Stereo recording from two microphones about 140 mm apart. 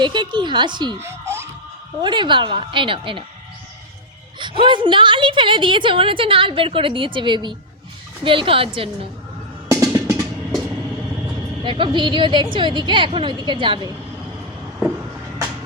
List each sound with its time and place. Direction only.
0.0 s a woman's voice: 35° right (ahead or behind)
0.9 s speech: 20° right (ahead or behind)
2.0 s a woman's voice: 35° right (ahead or behind)
4.6 s a woman's voice: 35° right (ahead or behind)
9.6 s music: 15° right (ahead or behind)
11.6 s a woman's voice: 35° right (ahead or behind)